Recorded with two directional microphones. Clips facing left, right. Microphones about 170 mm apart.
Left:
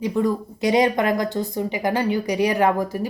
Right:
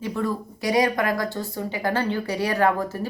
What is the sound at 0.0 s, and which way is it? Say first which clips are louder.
Speech: left 5 dB; 15° left (ahead or behind).